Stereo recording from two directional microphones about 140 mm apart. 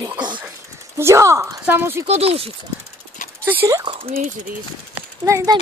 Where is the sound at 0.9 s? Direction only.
20° right (ahead or behind).